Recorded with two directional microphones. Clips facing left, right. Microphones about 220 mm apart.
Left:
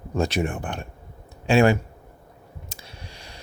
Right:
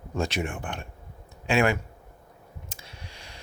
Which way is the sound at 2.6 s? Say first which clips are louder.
Left 3 dB; 35° left (ahead or behind).